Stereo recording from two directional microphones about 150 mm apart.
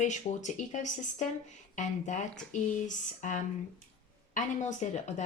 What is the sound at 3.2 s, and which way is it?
A woman's voice, 55° left (ahead or behind).